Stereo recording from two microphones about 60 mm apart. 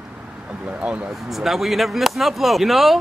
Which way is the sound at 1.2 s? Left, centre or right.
Centre.